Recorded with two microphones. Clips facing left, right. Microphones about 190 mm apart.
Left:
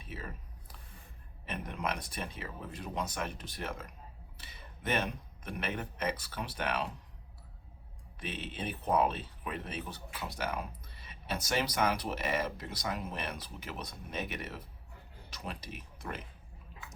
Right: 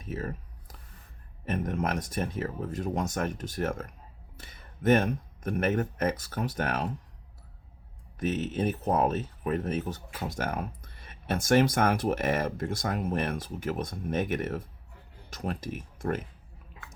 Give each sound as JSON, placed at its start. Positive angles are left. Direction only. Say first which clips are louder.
{"t": 0.0, "sound": "a sound", "louder": "right 9 dB", "side_deg": -45}
{"t": 1.5, "sound": "speech", "louder": "right 7 dB", "side_deg": -45}
{"t": 8.2, "sound": "speech", "louder": "right 11 dB", "side_deg": -45}